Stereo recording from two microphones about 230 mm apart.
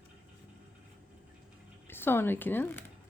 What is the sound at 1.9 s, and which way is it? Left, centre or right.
Speech, centre.